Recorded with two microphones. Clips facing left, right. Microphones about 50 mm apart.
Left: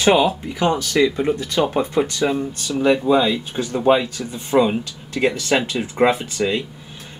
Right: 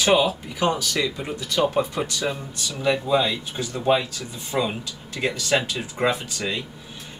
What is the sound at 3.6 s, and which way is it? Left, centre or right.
Speech, left.